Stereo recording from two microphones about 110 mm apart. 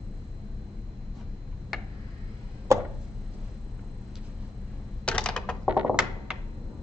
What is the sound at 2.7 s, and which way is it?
Chopping, 25° right (ahead or behind).